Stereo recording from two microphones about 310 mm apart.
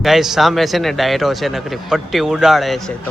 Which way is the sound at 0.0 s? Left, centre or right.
Centre.